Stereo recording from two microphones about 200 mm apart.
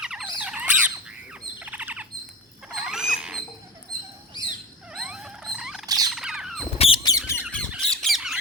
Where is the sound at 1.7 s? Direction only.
5° right (ahead or behind).